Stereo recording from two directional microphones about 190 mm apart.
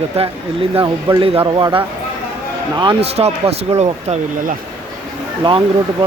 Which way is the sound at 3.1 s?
35° right (ahead or behind).